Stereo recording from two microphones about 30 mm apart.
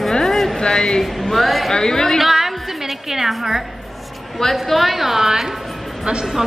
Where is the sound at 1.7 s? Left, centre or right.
Centre.